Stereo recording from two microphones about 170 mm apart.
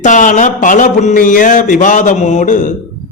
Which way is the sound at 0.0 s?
50° left (ahead or behind).